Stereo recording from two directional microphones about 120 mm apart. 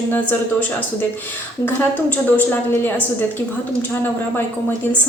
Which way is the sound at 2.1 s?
15° left (ahead or behind).